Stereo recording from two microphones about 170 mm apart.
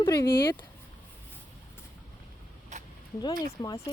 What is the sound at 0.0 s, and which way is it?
Speech, 20° left (ahead or behind).